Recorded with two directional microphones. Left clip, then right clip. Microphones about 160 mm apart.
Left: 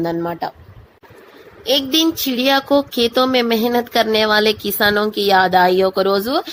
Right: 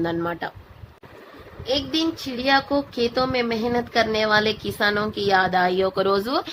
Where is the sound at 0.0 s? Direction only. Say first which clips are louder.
Left 4 dB; 30° left (ahead or behind).